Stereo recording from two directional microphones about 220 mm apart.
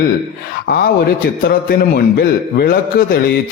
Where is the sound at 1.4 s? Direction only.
45° left (ahead or behind).